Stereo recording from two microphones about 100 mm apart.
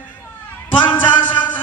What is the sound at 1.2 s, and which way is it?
Music, 15° left (ahead or behind).